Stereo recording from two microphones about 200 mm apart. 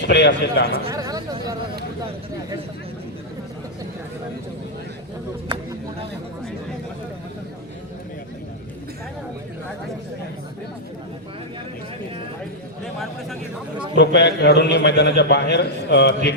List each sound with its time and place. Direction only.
0.0 s a man's voice: 60° left (ahead or behind)
0.9 s chatter: 15° right (ahead or behind)
5.5 s a sound: 20° right (ahead or behind)
14.0 s a man's voice: 55° left (ahead or behind)